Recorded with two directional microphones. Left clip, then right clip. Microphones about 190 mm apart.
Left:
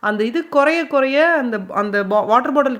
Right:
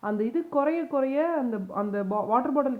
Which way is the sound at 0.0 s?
20° left (ahead or behind).